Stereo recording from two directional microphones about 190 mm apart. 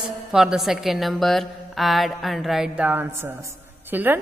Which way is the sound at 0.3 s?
5° right (ahead or behind).